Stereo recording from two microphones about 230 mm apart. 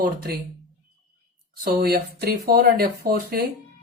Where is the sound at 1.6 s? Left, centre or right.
Right.